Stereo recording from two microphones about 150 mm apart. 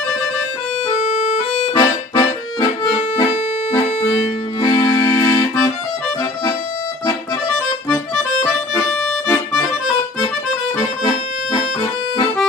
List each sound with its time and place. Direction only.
0.9 s music: 65° left (ahead or behind)
1.6 s music: 25° left (ahead or behind)
4.6 s accordion: 30° left (ahead or behind)
11.8 s accordion: 25° left (ahead or behind)